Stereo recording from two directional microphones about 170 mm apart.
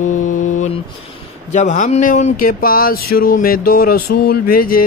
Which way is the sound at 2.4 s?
60° left (ahead or behind).